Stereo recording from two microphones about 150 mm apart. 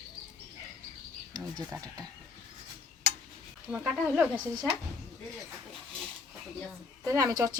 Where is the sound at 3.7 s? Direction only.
5° right (ahead or behind).